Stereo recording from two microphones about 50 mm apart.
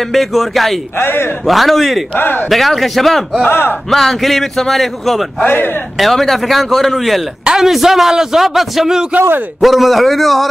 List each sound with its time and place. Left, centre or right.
0.1 s a man's voice: centre
0.9 s a man's voice: left
1.5 s a man's voice: centre
2.1 s a man's voice: left
2.5 s a man's voice: centre
3.4 s a man's voice: left
3.9 s a man's voice: centre